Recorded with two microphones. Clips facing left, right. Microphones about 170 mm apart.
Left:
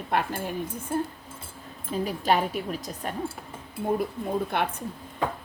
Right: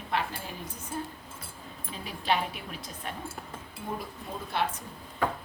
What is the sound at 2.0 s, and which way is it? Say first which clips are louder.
A woman's voice: left 4 dB; 45° left (ahead or behind).